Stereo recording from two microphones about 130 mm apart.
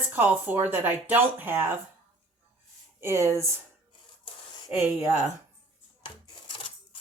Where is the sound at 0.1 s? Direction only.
15° right (ahead or behind).